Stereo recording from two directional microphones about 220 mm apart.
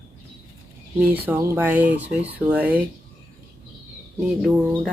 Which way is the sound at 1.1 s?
10° right (ahead or behind).